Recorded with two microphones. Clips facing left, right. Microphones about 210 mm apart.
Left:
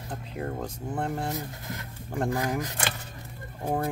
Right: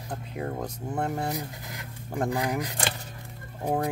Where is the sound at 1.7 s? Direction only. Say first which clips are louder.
Left 2 dB; 15° right (ahead or behind).